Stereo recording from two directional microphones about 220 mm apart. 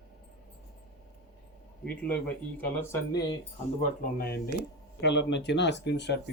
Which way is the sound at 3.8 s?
40° left (ahead or behind).